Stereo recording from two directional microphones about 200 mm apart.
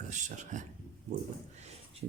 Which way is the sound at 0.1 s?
40° right (ahead or behind).